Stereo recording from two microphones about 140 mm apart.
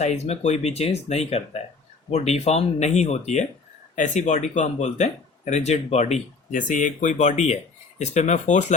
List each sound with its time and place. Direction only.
0.0 s speech: 50° left (ahead or behind)